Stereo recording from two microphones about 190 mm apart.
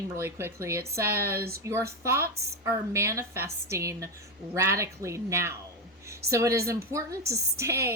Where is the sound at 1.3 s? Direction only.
55° right (ahead or behind).